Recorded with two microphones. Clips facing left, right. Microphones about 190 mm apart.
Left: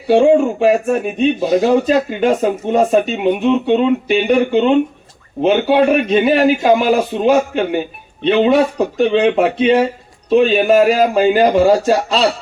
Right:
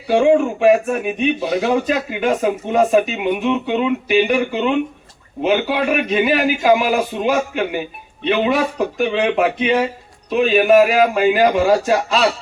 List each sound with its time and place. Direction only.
0.1 s a man's voice: 30° left (ahead or behind)
1.5 s a man's voice: 40° left (ahead or behind)
1.9 s a man's voice: 30° left (ahead or behind)